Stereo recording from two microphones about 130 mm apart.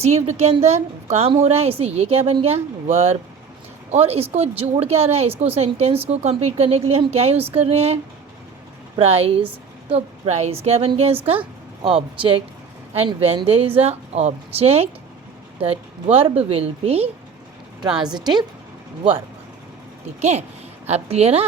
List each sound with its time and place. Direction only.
0.0 s a woman's voice: 55° right (ahead or behind)
9.0 s a woman's voice: 50° right (ahead or behind)
13.1 s a woman's voice: 50° right (ahead or behind)
18.0 s a woman's voice: 35° right (ahead or behind)
20.8 s a woman's voice: 55° right (ahead or behind)